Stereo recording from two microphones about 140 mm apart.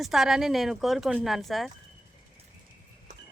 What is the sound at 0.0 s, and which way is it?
Speech, centre (ahead or behind).